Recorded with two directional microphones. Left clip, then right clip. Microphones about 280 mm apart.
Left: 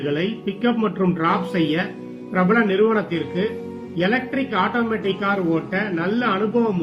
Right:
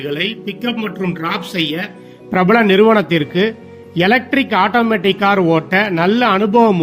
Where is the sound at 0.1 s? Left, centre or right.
Right.